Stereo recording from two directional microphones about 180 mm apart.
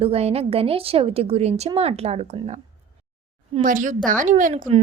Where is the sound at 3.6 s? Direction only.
45° right (ahead or behind).